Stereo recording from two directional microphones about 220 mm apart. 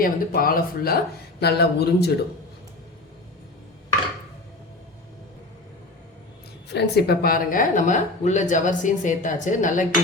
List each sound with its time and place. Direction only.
0.0 s a woman's voice: 40° left (ahead or behind)
6.7 s a woman's voice: 45° left (ahead or behind)